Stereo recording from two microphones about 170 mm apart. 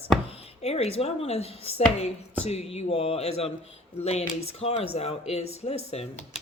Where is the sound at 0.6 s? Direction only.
35° left (ahead or behind).